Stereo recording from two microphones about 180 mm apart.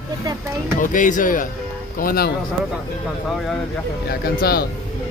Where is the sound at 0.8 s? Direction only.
45° left (ahead or behind).